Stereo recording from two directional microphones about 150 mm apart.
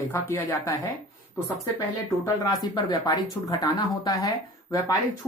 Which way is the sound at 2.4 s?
25° left (ahead or behind).